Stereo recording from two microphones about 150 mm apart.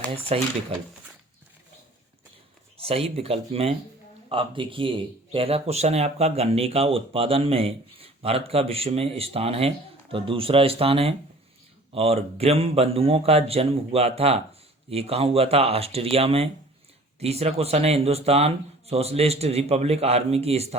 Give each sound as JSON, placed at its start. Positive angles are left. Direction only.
{"t": 0.3, "sound": "speech", "side_deg": -40}
{"t": 2.7, "sound": "speech", "side_deg": -40}